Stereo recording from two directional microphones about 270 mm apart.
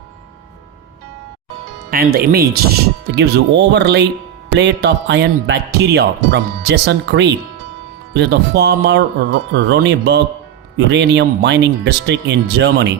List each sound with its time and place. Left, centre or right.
1.9 s speech: right